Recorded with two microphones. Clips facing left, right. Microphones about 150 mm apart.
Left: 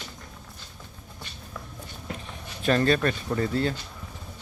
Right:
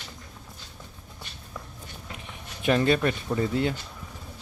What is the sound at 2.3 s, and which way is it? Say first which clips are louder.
Speech: even; 15° right (ahead or behind).